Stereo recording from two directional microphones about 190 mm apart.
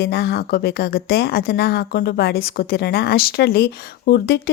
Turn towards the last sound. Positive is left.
turn(degrees=60)  # may be behind; listen again after turning